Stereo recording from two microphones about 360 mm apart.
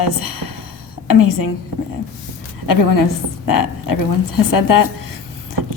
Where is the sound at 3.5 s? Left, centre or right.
Left.